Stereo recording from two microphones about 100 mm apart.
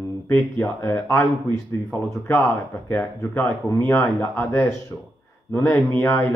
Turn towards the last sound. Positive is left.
turn(degrees=25)  # may be behind; listen again after turning